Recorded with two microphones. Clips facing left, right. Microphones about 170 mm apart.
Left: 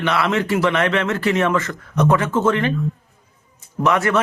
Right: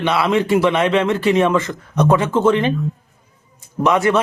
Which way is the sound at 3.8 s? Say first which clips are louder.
Right 3 dB; 15° right (ahead or behind).